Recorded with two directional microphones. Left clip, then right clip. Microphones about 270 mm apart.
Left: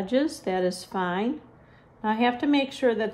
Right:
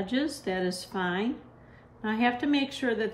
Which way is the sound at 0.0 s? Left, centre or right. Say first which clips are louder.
Left 5 dB; left.